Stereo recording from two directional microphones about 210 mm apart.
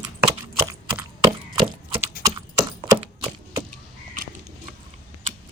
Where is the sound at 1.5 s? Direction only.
25° right (ahead or behind).